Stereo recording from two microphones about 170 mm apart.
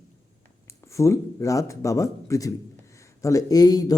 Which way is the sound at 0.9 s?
15° left (ahead or behind).